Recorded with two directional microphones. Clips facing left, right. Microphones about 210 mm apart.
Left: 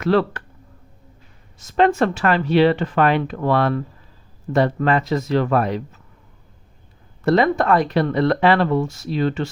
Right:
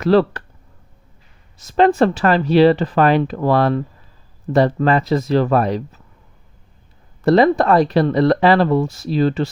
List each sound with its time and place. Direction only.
0.0 s speech: 35° right (ahead or behind)
1.5 s speech: 35° right (ahead or behind)
7.3 s speech: 35° right (ahead or behind)